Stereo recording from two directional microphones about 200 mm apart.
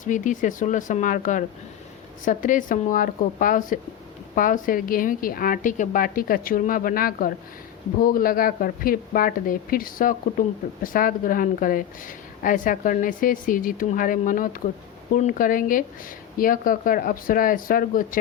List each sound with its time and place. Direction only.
0.0 s a woman's voice: 40° left (ahead or behind)